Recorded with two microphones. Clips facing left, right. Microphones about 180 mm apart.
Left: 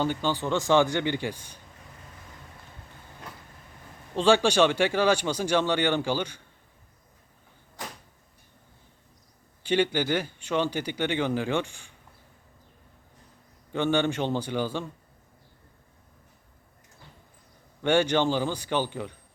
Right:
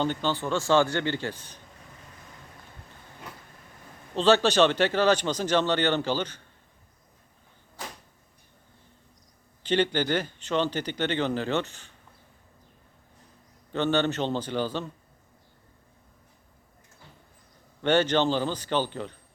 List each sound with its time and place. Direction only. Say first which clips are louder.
0.0 s speech: even; 10° left (ahead or behind)
4.1 s speech: even; 10° left (ahead or behind)
9.6 s speech: even; 10° left (ahead or behind)
13.7 s speech: even; 10° left (ahead or behind)
17.8 s speech: even; 10° left (ahead or behind)